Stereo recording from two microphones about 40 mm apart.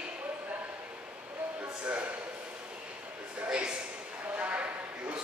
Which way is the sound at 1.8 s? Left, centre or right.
Right.